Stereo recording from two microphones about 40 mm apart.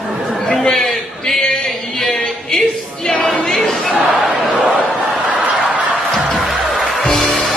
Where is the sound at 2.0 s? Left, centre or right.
Centre.